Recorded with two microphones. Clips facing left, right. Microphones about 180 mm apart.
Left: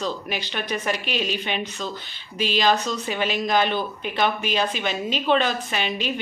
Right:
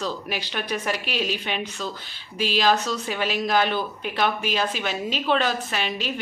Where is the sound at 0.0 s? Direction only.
5° right (ahead or behind).